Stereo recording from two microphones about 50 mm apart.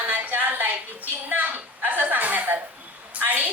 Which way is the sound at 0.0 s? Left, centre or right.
Right.